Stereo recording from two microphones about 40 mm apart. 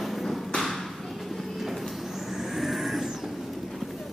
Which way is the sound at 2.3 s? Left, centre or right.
Centre.